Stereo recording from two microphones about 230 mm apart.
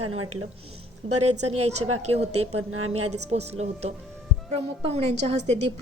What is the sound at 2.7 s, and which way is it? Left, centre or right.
Speech, right.